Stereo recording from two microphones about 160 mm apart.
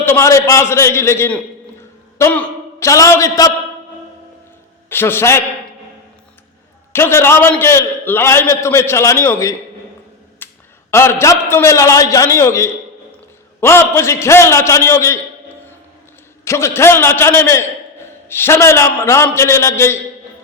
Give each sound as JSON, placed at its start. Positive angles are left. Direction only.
{"t": 0.0, "sound": "a man's voice", "side_deg": 15}
{"t": 4.9, "sound": "a man's voice", "side_deg": 15}
{"t": 6.9, "sound": "a man's voice", "side_deg": 15}
{"t": 10.4, "sound": "a sound", "side_deg": 10}
{"t": 10.9, "sound": "a man's voice", "side_deg": 15}
{"t": 16.4, "sound": "a man's voice", "side_deg": 20}